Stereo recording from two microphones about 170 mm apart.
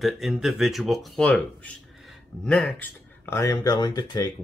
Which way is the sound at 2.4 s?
5° left (ahead or behind).